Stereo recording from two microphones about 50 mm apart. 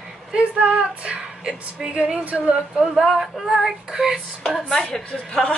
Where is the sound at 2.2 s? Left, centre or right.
Right.